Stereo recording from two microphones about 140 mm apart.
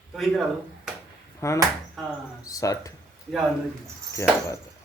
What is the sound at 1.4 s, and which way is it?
Speech, 20° left (ahead or behind).